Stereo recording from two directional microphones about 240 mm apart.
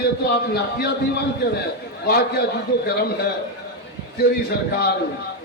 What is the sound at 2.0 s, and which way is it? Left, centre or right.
Speech, left.